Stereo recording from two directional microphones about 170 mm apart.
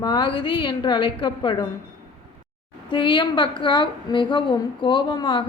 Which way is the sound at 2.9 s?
30° left (ahead or behind).